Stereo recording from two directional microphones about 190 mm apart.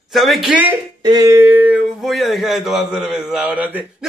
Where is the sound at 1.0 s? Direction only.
20° right (ahead or behind).